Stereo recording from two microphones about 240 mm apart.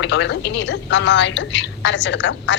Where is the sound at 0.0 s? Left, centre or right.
Left.